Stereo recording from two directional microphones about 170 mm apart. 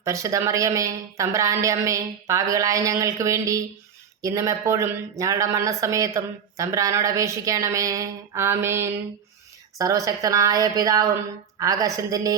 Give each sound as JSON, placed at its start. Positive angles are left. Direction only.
{"t": 0.0, "sound": "speech", "side_deg": -20}